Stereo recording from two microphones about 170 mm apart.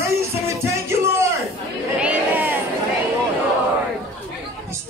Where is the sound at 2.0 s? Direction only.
10° right (ahead or behind).